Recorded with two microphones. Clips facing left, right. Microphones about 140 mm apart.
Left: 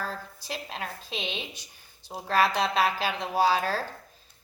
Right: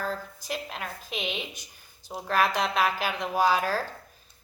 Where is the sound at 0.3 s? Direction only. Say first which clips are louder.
Right 1 dB; 30° left (ahead or behind).